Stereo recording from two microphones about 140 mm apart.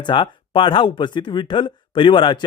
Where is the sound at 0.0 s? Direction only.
35° left (ahead or behind).